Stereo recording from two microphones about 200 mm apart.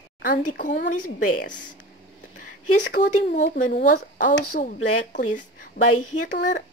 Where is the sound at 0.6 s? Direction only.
40° left (ahead or behind).